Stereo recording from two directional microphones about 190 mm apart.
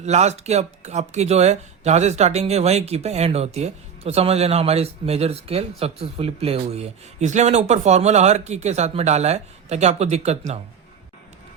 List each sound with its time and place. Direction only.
0.0 s speech: 35° right (ahead or behind)